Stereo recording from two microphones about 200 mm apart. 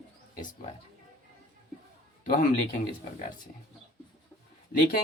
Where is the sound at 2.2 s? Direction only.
45° left (ahead or behind).